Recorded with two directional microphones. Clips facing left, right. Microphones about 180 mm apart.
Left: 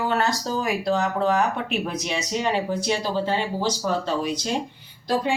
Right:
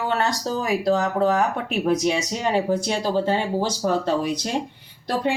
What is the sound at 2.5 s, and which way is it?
Speech, 45° right (ahead or behind).